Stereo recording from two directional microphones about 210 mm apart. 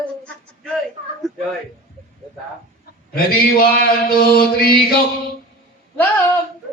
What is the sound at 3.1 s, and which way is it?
Mantra, 45° left (ahead or behind).